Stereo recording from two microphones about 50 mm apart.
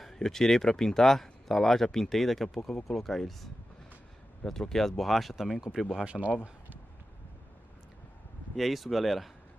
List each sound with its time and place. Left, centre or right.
0.0 s speech: centre
4.5 s speech: centre
6.0 s speech: centre
8.5 s speech: centre